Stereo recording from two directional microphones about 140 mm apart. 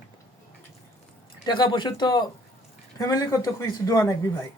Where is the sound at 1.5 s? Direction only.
35° left (ahead or behind).